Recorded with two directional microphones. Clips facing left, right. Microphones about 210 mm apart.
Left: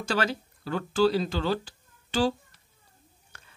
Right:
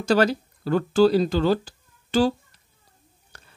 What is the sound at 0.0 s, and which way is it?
Speech, 40° right (ahead or behind).